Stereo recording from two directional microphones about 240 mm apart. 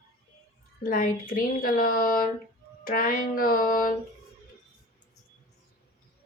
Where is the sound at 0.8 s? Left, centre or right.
Left.